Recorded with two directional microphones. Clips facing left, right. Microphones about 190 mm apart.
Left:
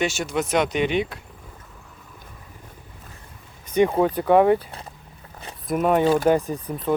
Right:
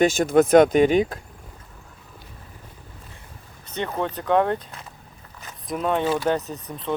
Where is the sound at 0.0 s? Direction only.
50° right (ahead or behind).